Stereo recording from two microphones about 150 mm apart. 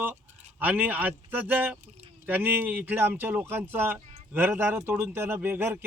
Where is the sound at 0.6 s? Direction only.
10° right (ahead or behind).